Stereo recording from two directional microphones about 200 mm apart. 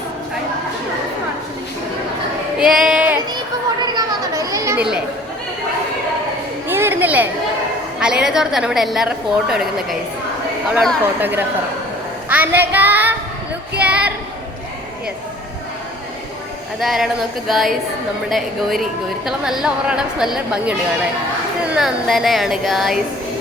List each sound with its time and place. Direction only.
2.6 s female singing: 5° right (ahead or behind)
3.8 s children playing: 20° right (ahead or behind)
6.7 s a sound: 10° right (ahead or behind)
7.9 s a woman's voice: 5° right (ahead or behind)
10.8 s speech: 5° right (ahead or behind)
12.3 s child singing: 10° right (ahead or behind)
13.7 s a sound: 5° right (ahead or behind)
16.8 s a woman's voice: centre (ahead or behind)